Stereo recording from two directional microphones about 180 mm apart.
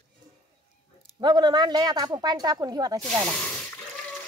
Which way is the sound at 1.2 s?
25° right (ahead or behind).